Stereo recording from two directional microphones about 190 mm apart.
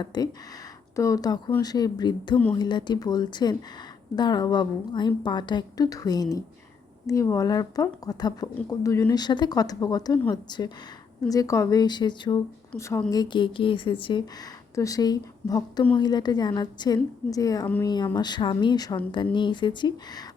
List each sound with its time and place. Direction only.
0.0 s speech: 20° left (ahead or behind)